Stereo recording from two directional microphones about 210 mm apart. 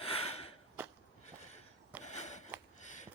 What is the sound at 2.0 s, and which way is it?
Sniff, 35° left (ahead or behind).